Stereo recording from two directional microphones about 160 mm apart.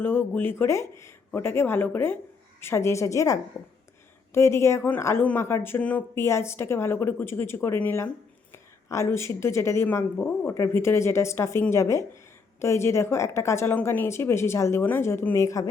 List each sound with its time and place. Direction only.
0.0 s a woman's voice: 10° left (ahead or behind)
4.4 s speech: 15° left (ahead or behind)